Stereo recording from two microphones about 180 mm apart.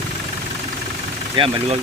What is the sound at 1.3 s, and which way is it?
Speech, 30° right (ahead or behind).